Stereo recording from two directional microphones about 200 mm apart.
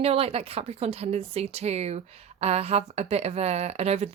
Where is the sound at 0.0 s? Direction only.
30° right (ahead or behind).